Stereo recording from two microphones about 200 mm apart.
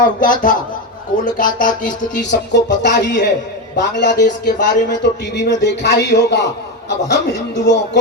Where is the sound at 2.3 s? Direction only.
60° left (ahead or behind).